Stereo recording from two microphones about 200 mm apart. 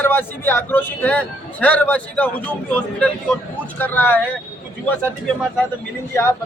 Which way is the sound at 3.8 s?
10° left (ahead or behind).